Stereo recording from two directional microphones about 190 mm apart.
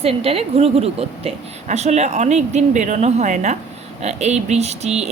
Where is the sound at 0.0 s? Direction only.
30° right (ahead or behind).